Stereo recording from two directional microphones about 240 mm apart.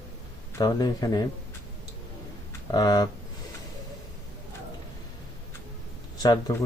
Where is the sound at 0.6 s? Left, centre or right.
Centre.